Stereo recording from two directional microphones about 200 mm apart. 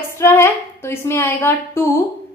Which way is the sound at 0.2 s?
10° left (ahead or behind).